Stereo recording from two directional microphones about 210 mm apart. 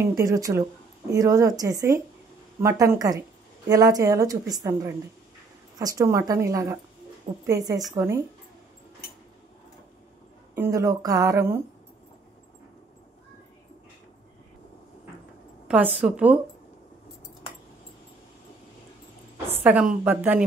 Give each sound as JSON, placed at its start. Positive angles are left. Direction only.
{"t": 0.0, "sound": "speech", "side_deg": -15}
{"t": 10.5, "sound": "speech", "side_deg": -15}
{"t": 16.0, "sound": "speech", "side_deg": -5}
{"t": 19.6, "sound": "speech", "side_deg": -5}